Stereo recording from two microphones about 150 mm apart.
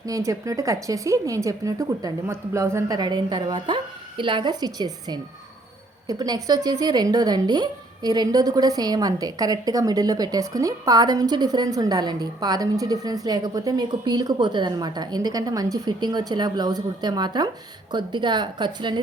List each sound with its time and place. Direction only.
0.0 s a woman's voice: 20° right (ahead or behind)